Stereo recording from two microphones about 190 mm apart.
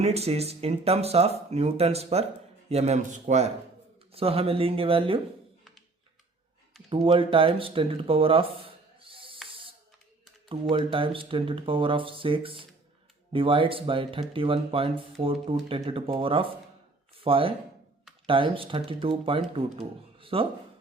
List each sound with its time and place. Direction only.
0.0 s speech: 35° right (ahead or behind)
6.9 s speech: 25° right (ahead or behind)
9.5 s a sound: 30° right (ahead or behind)
10.5 s speech: 25° right (ahead or behind)